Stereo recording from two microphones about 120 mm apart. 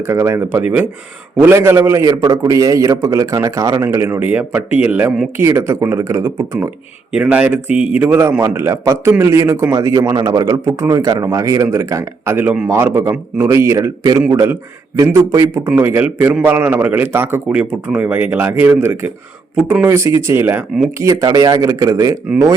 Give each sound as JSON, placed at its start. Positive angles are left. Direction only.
{"t": 0.0, "sound": "a man's voice", "side_deg": -20}
{"t": 7.1, "sound": "a man's voice", "side_deg": -10}